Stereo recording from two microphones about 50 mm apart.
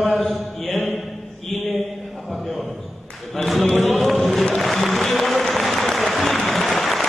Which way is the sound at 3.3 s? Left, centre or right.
Centre.